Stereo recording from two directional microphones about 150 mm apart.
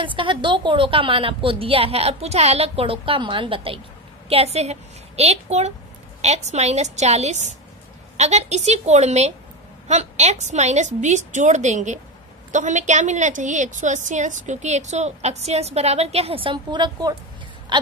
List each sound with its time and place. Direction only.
0.0 s a woman's voice: 35° right (ahead or behind)